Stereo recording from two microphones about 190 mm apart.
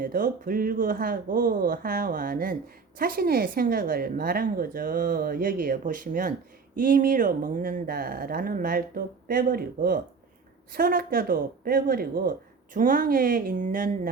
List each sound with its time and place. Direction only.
0.0 s a woman's voice: 45° right (ahead or behind)